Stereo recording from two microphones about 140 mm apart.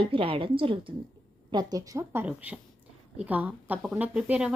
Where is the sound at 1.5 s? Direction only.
30° right (ahead or behind).